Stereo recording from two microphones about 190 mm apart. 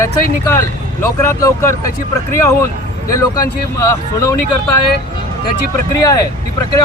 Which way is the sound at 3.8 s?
15° left (ahead or behind).